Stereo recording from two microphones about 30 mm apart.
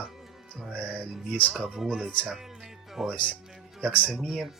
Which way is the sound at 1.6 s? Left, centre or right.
Centre.